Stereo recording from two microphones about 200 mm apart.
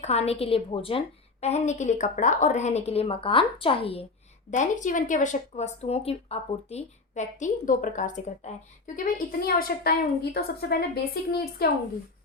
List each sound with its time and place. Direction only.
0.0 s speech: 30° left (ahead or behind)
4.5 s a woman's voice: 40° left (ahead or behind)